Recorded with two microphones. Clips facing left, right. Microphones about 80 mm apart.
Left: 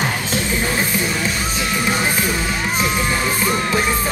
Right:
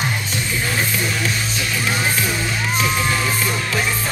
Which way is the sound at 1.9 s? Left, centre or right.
Centre.